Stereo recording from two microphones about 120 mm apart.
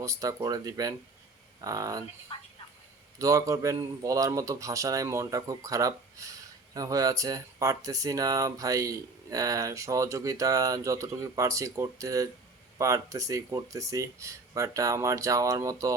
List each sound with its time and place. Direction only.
0.0 s speech: 25° right (ahead or behind)
3.2 s speech: 30° right (ahead or behind)